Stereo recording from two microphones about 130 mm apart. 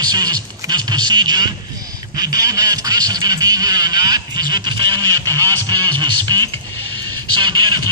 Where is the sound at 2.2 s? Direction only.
30° right (ahead or behind).